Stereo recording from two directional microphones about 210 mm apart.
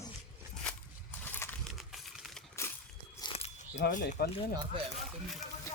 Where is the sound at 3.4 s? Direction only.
35° left (ahead or behind).